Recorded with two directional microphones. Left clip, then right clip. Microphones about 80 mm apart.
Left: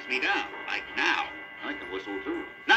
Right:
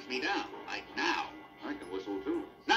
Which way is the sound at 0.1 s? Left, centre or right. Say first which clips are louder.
Left 7 dB; left.